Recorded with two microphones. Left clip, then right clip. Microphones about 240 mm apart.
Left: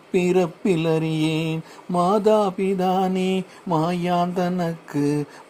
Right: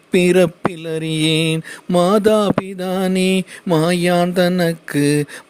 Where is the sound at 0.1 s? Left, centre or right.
Right.